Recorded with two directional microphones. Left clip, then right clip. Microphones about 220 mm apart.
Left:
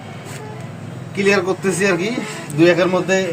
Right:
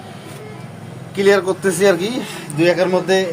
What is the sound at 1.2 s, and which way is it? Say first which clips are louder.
Speech: right 2 dB; 30° right (ahead or behind).